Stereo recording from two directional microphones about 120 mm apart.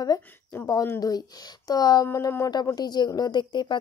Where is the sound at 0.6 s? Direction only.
30° left (ahead or behind).